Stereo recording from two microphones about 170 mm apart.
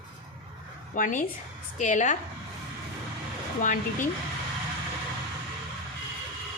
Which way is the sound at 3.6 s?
50° left (ahead or behind).